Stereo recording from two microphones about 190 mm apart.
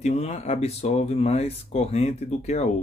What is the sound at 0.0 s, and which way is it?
Speech, 35° left (ahead or behind).